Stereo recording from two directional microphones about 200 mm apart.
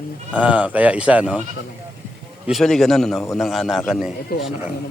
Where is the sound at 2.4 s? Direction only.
Centre (ahead or behind).